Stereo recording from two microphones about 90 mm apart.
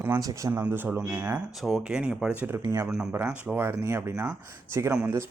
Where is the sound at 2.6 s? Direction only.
40° right (ahead or behind).